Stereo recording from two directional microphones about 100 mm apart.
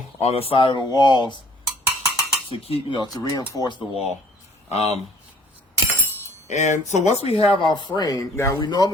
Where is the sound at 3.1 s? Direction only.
40° left (ahead or behind).